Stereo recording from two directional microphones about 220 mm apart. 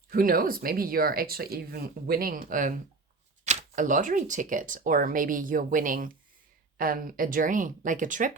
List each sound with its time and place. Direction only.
0.1 s speech: 40° right (ahead or behind)